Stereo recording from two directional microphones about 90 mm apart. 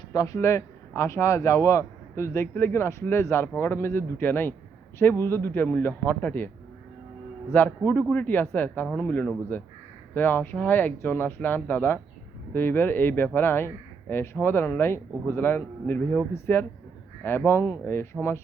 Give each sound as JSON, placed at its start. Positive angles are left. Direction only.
{"t": 0.1, "sound": "a man's voice", "side_deg": 40}
{"t": 7.5, "sound": "a man's voice", "side_deg": 20}